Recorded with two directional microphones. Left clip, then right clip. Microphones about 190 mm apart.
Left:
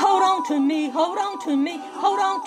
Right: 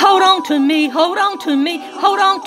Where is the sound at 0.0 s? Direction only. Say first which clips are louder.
Right 7 dB; 20° right (ahead or behind).